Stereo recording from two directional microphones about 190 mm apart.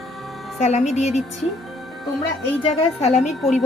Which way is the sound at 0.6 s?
35° left (ahead or behind).